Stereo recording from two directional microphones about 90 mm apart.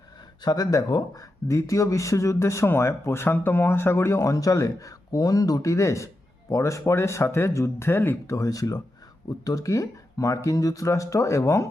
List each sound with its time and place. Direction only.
0.4 s speech: 45° left (ahead or behind)